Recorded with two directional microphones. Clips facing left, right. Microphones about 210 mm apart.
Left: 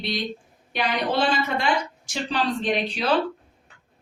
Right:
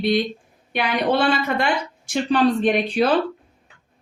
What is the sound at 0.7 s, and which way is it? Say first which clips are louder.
A woman's voice: right 4 dB; 60° right (ahead or behind).